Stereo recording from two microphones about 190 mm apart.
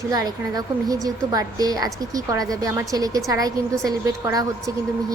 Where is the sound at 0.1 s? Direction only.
20° right (ahead or behind).